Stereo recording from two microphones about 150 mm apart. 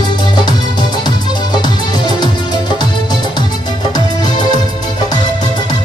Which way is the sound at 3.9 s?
30° left (ahead or behind).